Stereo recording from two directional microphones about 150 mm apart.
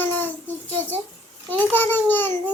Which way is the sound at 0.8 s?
15° left (ahead or behind).